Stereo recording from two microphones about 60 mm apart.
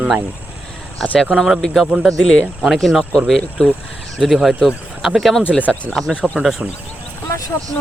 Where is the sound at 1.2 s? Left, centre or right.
Centre.